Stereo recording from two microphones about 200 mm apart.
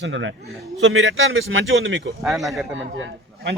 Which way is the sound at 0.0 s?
70° right (ahead or behind).